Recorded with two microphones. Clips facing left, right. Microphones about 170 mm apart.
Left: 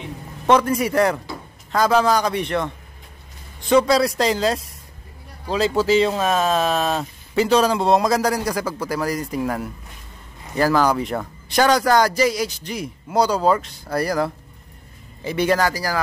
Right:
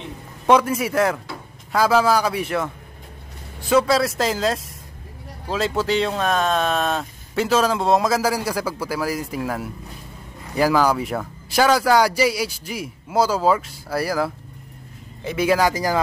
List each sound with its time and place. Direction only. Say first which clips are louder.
0.5 s speech: even; 5° right (ahead or behind)
15.7 s speech: right 3 dB; 20° right (ahead or behind)